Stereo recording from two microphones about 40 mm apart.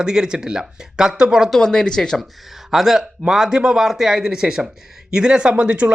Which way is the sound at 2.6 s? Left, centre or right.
Centre.